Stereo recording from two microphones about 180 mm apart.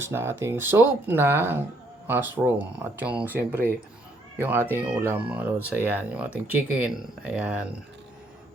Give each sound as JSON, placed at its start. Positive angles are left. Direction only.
{"t": 0.0, "sound": "speech", "side_deg": -15}